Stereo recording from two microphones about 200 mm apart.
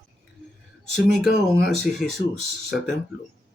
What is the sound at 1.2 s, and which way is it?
Speech, 55° left (ahead or behind).